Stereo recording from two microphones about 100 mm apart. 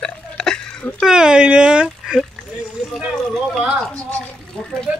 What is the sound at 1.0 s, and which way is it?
Speech, 5° right (ahead or behind).